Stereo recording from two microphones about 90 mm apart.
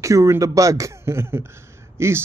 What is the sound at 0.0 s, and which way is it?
Speech, 35° right (ahead or behind).